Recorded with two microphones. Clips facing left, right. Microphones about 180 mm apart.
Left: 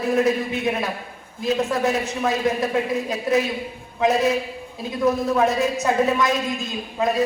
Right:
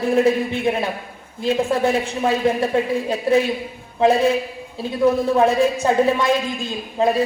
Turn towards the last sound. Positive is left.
turn(degrees=-30)  # may be behind; listen again after turning